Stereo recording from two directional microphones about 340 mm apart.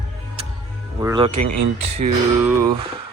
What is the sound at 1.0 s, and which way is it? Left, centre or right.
Speech, centre.